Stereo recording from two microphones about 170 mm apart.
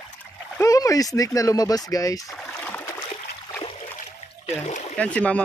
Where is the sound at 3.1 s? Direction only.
30° left (ahead or behind).